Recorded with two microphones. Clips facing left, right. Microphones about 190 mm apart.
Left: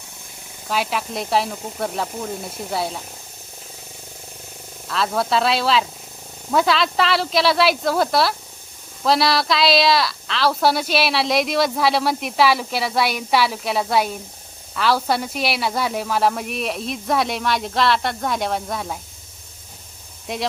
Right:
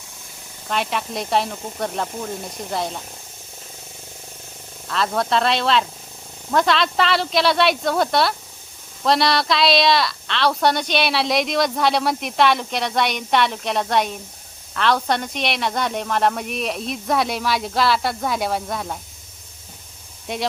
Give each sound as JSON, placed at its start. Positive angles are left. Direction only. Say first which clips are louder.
{"t": 0.7, "sound": "a woman's voice", "louder": "left 1 dB", "side_deg": 5}
{"t": 4.9, "sound": "a woman's voice", "louder": "even", "side_deg": 0}
{"t": 20.3, "sound": "a woman's voice", "louder": "even", "side_deg": 0}